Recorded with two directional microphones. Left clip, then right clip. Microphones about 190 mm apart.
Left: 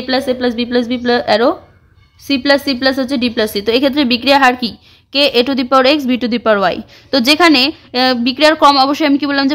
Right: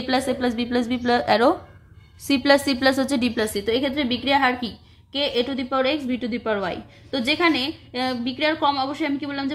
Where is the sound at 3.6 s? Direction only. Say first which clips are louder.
Left 12 dB; 40° left (ahead or behind).